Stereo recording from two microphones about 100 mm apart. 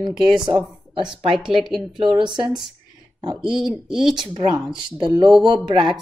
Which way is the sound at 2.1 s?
50° right (ahead or behind).